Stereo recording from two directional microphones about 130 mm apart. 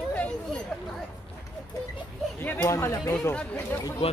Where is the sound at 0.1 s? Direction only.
10° left (ahead or behind).